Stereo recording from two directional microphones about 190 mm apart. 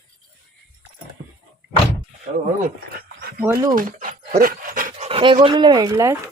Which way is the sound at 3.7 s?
45° right (ahead or behind).